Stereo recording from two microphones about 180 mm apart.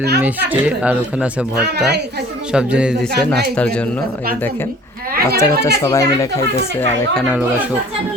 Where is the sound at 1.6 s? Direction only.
65° right (ahead or behind).